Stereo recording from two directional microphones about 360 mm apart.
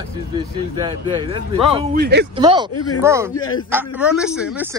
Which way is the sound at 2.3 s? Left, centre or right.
Centre.